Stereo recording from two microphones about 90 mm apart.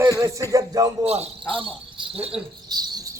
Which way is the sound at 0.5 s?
40° right (ahead or behind).